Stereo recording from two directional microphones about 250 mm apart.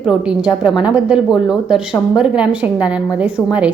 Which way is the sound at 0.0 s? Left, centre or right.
Centre.